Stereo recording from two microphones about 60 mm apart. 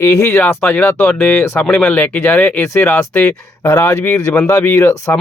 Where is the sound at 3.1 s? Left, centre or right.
Left.